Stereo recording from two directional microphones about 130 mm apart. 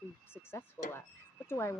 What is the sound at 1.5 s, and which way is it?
Speech, 20° left (ahead or behind).